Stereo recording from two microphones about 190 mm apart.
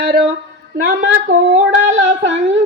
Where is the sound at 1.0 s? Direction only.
70° right (ahead or behind).